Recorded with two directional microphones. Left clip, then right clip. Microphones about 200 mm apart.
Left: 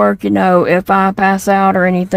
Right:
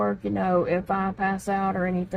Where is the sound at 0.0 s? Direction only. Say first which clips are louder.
Left 14 dB; 60° left (ahead or behind).